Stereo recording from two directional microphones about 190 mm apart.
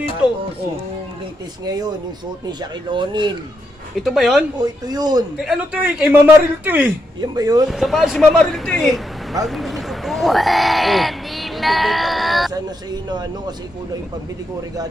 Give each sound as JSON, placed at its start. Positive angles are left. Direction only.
{"t": 0.2, "sound": "speech", "side_deg": -5}
{"t": 1.6, "sound": "speech", "side_deg": -20}
{"t": 4.0, "sound": "speech", "side_deg": 0}
{"t": 4.6, "sound": "speech", "side_deg": -20}
{"t": 5.4, "sound": "a man's voice", "side_deg": -5}
{"t": 7.2, "sound": "speech", "side_deg": -20}
{"t": 7.7, "sound": "speech", "side_deg": 0}
{"t": 12.5, "sound": "speech", "side_deg": -20}